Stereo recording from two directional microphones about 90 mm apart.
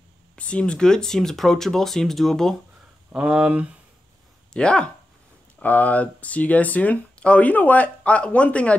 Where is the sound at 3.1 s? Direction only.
10° right (ahead or behind).